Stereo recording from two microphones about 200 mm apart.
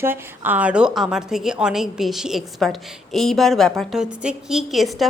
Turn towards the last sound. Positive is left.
turn(degrees=0)  # may be behind; listen again after turning